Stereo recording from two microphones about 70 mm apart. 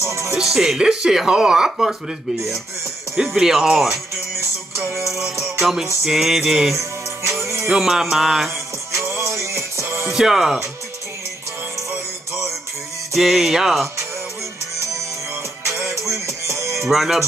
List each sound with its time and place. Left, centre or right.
0.0 s speech: right
0.3 s speech: centre
3.2 s speech: centre
4.8 s music: right
5.6 s music: centre
6.7 s music: right
7.6 s music: centre
8.9 s music: right
10.1 s speech: centre
13.1 s music: centre
15.6 s music: right
16.8 s music: centre